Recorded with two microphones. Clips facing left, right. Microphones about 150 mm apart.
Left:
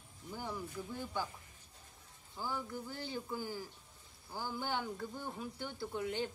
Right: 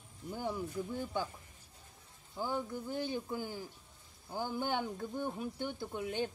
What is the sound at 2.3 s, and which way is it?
Speech, 20° right (ahead or behind).